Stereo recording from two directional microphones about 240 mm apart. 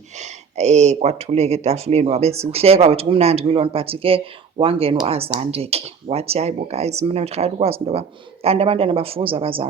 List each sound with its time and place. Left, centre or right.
0.2 s speech: right